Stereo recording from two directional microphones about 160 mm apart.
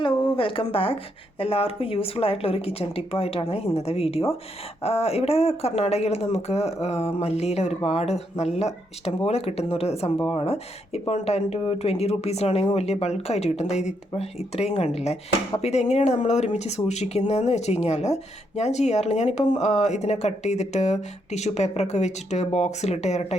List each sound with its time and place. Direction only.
0.0 s speech: 35° left (ahead or behind)